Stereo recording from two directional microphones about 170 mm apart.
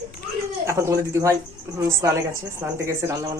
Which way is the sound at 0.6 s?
15° right (ahead or behind).